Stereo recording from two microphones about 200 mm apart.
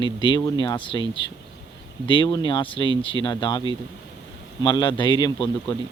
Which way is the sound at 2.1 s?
25° left (ahead or behind).